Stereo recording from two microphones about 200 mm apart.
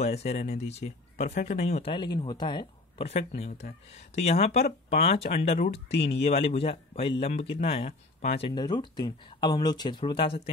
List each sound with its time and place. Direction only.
0.0 s speech: 30° left (ahead or behind)